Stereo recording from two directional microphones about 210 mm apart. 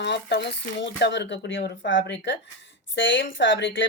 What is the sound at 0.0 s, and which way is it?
Speech, 55° left (ahead or behind).